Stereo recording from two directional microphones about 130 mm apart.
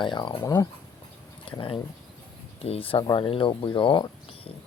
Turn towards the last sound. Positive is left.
turn(degrees=40)  # may be behind; listen again after turning